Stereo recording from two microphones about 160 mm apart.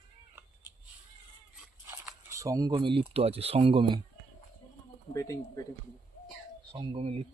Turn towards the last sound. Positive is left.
turn(degrees=-35)  # may be behind; listen again after turning